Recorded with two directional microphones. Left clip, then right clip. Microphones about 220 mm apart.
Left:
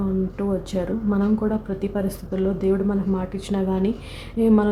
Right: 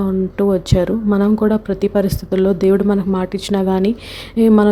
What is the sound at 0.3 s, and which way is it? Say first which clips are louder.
Speech: right 10 dB; 35° right (ahead or behind).